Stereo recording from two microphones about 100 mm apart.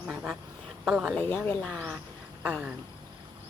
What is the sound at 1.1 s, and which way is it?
Speech, 15° left (ahead or behind).